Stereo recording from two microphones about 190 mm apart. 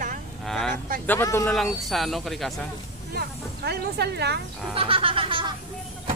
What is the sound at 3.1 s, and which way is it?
Speech, 60° right (ahead or behind).